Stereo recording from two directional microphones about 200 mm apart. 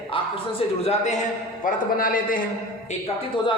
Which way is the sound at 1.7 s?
45° left (ahead or behind).